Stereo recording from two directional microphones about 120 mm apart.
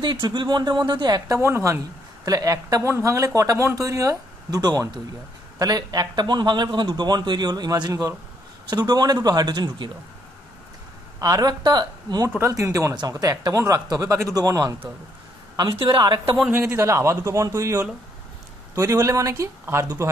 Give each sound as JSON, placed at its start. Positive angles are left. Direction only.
{"t": 0.0, "sound": "a man's voice", "side_deg": -40}
{"t": 1.3, "sound": "a man's voice", "side_deg": -25}
{"t": 11.1, "sound": "a man's voice", "side_deg": -30}
{"t": 16.4, "sound": "speech", "side_deg": -15}